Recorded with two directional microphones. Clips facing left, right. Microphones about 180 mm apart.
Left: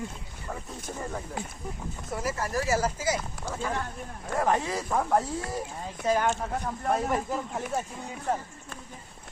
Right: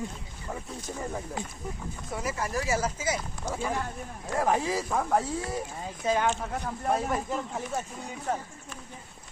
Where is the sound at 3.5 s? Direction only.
10° right (ahead or behind).